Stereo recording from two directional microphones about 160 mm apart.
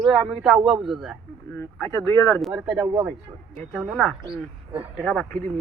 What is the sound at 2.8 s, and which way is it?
Speech, 20° right (ahead or behind).